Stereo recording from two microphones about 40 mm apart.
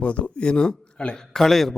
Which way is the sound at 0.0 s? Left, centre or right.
Left.